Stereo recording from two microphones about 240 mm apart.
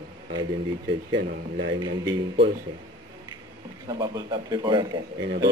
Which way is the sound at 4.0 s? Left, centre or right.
Centre.